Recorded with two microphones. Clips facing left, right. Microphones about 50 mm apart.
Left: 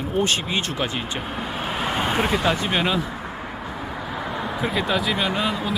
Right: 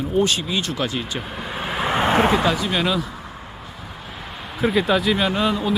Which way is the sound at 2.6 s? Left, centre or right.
Left.